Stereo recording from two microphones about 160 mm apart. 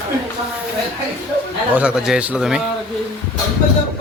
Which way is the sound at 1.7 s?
5° right (ahead or behind).